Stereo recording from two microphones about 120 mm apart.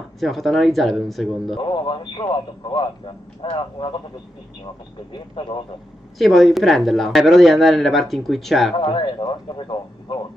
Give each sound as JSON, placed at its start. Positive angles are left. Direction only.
{"t": 0.2, "sound": "speech", "side_deg": 0}
{"t": 1.6, "sound": "speech", "side_deg": 40}
{"t": 5.1, "sound": "speech", "side_deg": 45}
{"t": 6.1, "sound": "speech", "side_deg": 0}
{"t": 8.7, "sound": "speech", "side_deg": 45}